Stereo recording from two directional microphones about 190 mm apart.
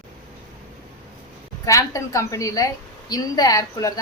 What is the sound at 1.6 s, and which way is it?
A woman's voice, 15° left (ahead or behind).